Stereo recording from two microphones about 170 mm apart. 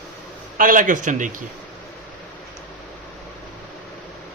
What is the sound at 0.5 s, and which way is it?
Speech, 55° right (ahead or behind).